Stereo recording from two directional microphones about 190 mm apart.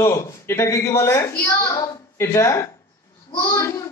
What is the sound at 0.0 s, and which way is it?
Speech, 15° left (ahead or behind).